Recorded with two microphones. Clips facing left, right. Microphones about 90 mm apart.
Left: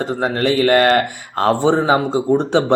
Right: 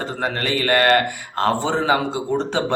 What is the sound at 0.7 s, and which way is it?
Speech, 40° left (ahead or behind).